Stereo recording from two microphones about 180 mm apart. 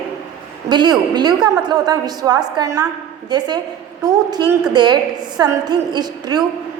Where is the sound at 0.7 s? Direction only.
25° right (ahead or behind).